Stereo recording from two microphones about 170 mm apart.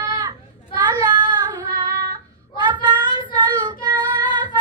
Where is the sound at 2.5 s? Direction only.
25° right (ahead or behind).